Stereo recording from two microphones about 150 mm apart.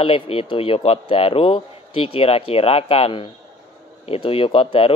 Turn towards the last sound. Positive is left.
turn(degrees=35)  # may be behind; listen again after turning